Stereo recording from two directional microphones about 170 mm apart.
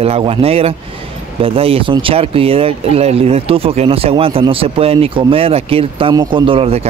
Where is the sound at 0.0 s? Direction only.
35° right (ahead or behind).